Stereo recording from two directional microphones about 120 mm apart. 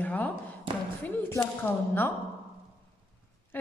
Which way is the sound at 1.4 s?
15° left (ahead or behind).